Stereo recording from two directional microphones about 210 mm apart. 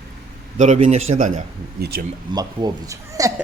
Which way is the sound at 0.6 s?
35° right (ahead or behind).